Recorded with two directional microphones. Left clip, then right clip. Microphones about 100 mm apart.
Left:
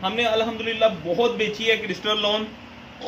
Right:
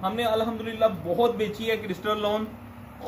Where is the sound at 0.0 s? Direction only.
Centre (ahead or behind).